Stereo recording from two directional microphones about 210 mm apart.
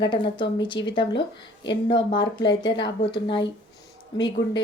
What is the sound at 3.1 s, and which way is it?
Speech, 20° left (ahead or behind).